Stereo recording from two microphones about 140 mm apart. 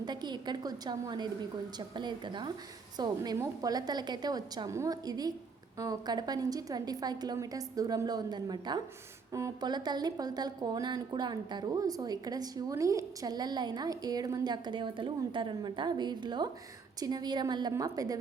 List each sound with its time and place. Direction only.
0.0 s a woman's voice: 30° right (ahead or behind)